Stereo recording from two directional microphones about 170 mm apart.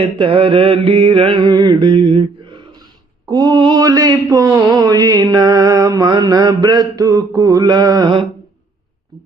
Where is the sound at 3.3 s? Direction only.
25° right (ahead or behind).